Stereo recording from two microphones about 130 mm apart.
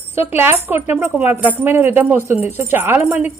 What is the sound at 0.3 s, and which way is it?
A woman's voice, 15° right (ahead or behind).